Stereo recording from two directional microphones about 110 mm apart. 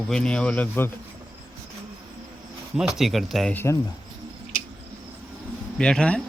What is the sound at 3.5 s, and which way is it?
Speech, 25° left (ahead or behind).